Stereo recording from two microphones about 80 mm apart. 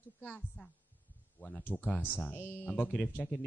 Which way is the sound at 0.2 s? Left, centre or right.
Centre.